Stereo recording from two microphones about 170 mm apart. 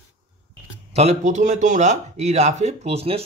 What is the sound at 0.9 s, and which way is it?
Speech, 45° right (ahead or behind).